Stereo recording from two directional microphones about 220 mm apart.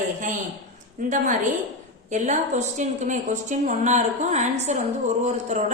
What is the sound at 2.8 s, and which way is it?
Speech, 35° right (ahead or behind).